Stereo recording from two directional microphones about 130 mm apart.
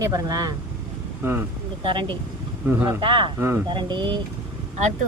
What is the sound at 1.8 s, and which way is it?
Speech, 40° right (ahead or behind).